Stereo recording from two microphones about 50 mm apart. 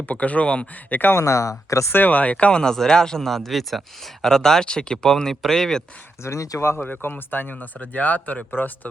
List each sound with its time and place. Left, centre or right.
0.0 s speech: left
0.9 s speech: left
1.1 s speech: left
1.9 s speech: left; by 5.8 s centre
6.2 s speech: left
6.7 s speech: left
7.6 s speech: left